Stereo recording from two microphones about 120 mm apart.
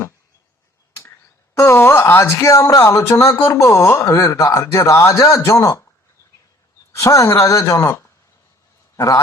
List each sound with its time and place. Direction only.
1.5 s speech: 20° left (ahead or behind)
6.9 s speech: 25° left (ahead or behind)